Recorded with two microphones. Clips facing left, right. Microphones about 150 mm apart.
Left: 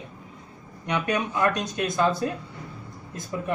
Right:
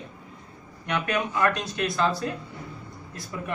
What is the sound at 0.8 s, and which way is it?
Speech, 15° left (ahead or behind).